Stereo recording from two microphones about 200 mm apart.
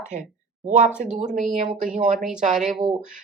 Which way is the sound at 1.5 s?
35° right (ahead or behind).